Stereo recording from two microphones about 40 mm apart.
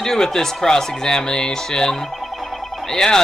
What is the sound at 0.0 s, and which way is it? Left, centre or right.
Speech, centre.